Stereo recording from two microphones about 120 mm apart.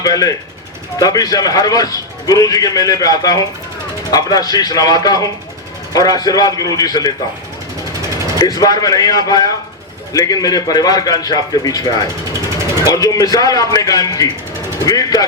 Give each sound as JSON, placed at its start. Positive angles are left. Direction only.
{"t": 0.0, "sound": "a man's voice", "side_deg": 30}
{"t": 8.4, "sound": "a man's voice", "side_deg": 30}